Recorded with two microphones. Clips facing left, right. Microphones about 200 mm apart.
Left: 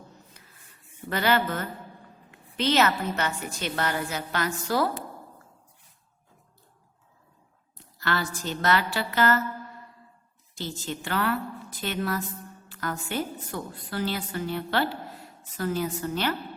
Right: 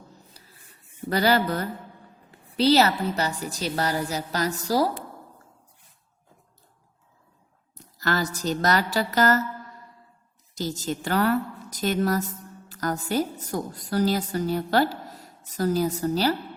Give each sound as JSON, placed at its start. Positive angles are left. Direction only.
{"t": 0.4, "sound": "a sound", "side_deg": -35}
{"t": 1.1, "sound": "a woman's voice", "side_deg": -40}
{"t": 7.8, "sound": "a woman's voice", "side_deg": -40}
{"t": 10.5, "sound": "a woman's voice", "side_deg": -40}